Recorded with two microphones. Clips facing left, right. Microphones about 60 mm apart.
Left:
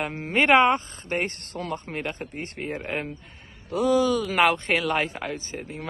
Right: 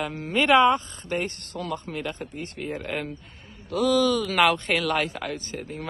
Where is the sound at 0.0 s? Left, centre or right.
Left.